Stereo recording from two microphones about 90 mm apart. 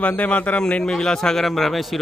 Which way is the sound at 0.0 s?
15° left (ahead or behind).